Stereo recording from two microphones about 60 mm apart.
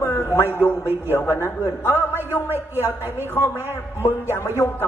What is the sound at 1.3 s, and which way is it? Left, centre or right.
A woman's voice, left.